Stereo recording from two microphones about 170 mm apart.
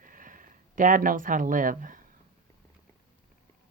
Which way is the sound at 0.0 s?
55° right (ahead or behind).